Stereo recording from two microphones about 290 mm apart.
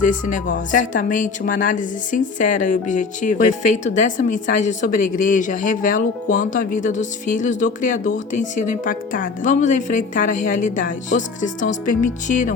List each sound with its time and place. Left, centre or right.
0.3 s a woman's voice: left